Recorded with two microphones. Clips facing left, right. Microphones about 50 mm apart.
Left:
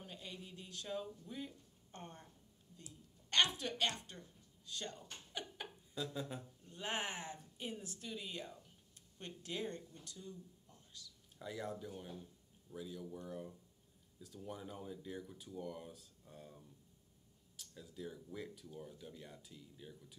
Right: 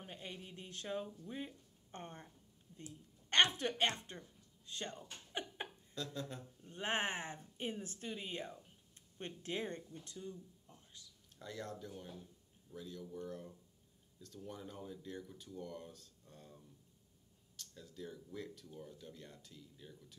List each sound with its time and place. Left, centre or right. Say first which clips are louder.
0.0 s a sound: right 2 dB; right
1.0 s a woman's voice: right 1 dB; right
5.9 s speech: left 1 dB; centre
6.6 s a woman's voice: right 4 dB; right
11.3 s speech: left 2 dB; centre